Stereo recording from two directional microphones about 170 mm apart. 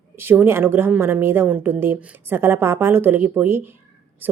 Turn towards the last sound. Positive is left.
turn(degrees=-10)  # may be behind; listen again after turning